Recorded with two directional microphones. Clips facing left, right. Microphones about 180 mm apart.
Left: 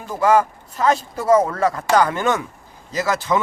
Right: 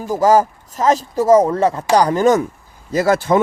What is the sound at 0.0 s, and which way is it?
Speech, 40° right (ahead or behind).